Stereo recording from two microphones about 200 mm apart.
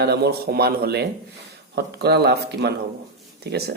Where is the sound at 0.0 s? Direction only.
55° right (ahead or behind).